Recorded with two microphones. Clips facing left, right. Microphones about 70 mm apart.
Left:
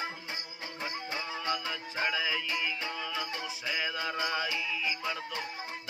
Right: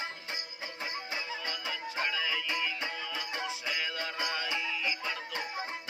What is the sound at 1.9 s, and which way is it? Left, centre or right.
Music, centre.